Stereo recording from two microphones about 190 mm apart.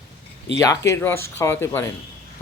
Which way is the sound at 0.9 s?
10° left (ahead or behind).